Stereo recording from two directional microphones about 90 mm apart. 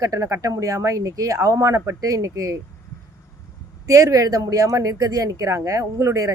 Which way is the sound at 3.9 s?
40° right (ahead or behind).